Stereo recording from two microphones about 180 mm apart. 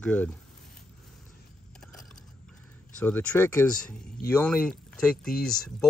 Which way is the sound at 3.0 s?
10° left (ahead or behind).